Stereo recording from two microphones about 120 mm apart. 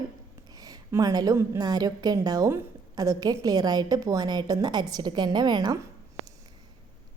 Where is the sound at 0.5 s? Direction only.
30° right (ahead or behind).